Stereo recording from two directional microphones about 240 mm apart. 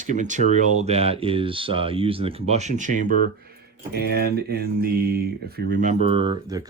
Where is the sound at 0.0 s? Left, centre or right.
Right.